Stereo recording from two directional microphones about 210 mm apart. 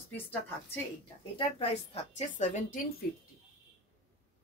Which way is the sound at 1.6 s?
30° left (ahead or behind).